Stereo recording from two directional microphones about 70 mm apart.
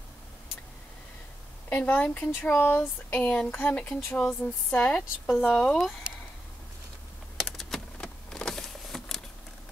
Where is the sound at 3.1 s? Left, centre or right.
Centre.